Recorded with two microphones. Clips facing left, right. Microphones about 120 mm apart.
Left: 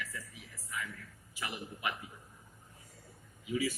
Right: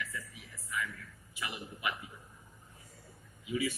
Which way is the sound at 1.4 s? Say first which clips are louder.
Even; 40° left (ahead or behind).